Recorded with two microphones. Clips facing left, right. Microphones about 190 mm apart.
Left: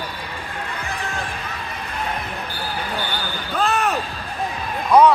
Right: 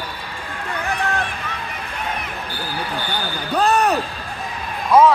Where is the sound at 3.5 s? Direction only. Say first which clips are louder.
Right 4 dB; 40° right (ahead or behind).